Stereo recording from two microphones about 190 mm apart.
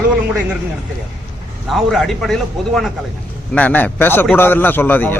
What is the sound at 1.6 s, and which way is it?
A man's voice, centre (ahead or behind).